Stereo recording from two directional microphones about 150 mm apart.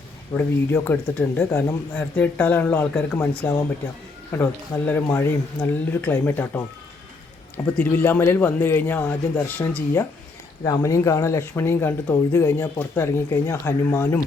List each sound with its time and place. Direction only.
0.3 s speech: 15° left (ahead or behind)
4.9 s speech: 15° left (ahead or behind)